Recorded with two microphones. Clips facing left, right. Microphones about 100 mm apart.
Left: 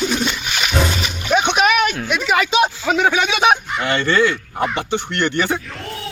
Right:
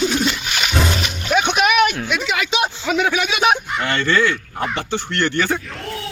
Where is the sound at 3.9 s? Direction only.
25° left (ahead or behind).